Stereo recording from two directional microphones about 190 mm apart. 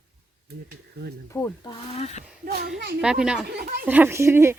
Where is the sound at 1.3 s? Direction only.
15° left (ahead or behind).